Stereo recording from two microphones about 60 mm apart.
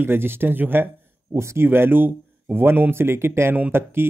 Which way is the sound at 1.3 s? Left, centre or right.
Right.